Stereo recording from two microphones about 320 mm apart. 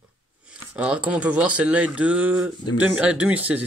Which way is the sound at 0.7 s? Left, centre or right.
Centre.